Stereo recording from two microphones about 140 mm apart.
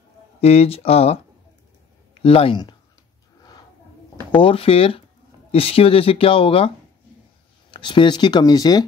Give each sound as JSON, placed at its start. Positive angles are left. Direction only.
{"t": 0.4, "sound": "speech", "side_deg": 45}
{"t": 2.2, "sound": "speech", "side_deg": 40}
{"t": 4.3, "sound": "speech", "side_deg": 40}
{"t": 7.7, "sound": "speech", "side_deg": 35}